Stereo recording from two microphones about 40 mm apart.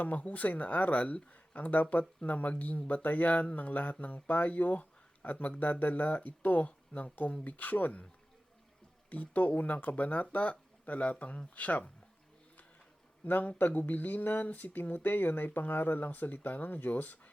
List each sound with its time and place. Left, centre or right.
0.0 s speech: left
9.0 s speech: left
13.2 s speech: left